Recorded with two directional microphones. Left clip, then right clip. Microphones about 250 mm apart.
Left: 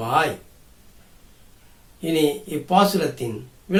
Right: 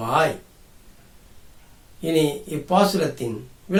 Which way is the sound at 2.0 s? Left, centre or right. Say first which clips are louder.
Even; centre.